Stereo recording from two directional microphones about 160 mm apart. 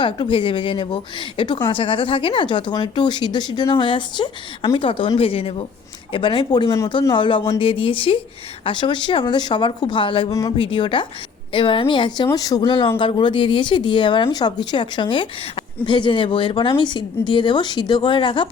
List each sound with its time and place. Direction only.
0.0 s speech: 30° left (ahead or behind)